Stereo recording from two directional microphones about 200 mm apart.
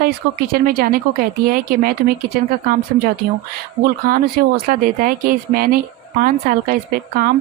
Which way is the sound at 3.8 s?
45° right (ahead or behind).